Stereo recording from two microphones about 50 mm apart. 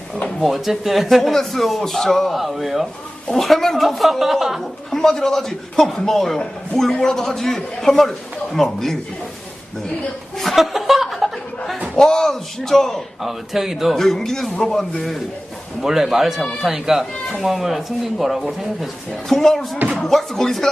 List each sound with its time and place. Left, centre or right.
0.4 s speech: centre
4.9 s a man's voice: centre
10.3 s chuckle: centre
11.9 s a man's voice: centre
13.2 s speech: centre
13.9 s a man's voice: centre
15.8 s speech: centre
19.3 s a man's voice: centre